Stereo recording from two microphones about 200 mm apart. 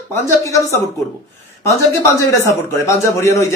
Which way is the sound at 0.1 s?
15° left (ahead or behind).